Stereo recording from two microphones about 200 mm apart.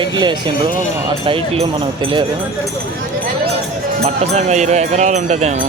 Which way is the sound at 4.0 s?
35° right (ahead or behind).